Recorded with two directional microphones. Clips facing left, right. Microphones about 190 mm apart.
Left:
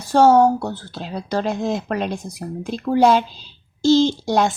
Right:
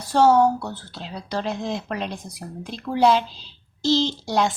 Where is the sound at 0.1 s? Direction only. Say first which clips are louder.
Left 3 dB; 45° left (ahead or behind).